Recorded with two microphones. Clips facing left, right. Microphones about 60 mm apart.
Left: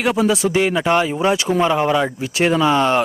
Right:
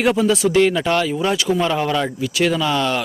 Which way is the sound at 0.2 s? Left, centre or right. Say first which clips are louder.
Right 1 dB; centre.